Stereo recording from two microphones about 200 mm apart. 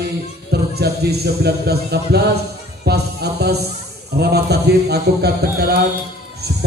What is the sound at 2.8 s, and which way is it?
Music, 55° right (ahead or behind).